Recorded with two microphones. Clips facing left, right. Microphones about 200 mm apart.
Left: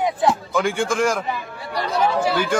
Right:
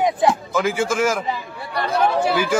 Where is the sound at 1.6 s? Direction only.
60° right (ahead or behind).